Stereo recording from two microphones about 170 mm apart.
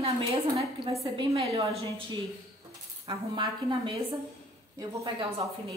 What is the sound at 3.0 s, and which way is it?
A woman's voice, 25° right (ahead or behind).